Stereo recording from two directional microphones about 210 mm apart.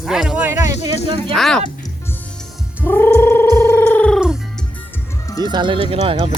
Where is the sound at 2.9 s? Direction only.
10° left (ahead or behind).